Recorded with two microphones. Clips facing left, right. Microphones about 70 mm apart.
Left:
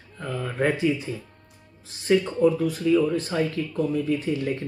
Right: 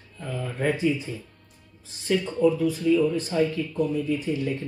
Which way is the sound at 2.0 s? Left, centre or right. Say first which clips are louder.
Left 2 dB; left.